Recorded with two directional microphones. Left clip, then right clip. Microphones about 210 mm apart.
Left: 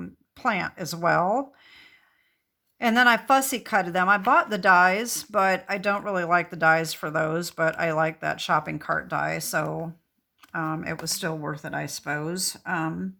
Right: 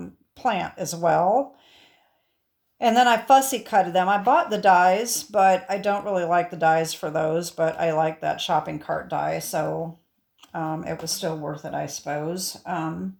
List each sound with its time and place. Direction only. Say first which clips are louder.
0.0 s speech: right 2 dB; 20° left (ahead or behind)
2.7 s speech: right 2 dB; 15° left (ahead or behind)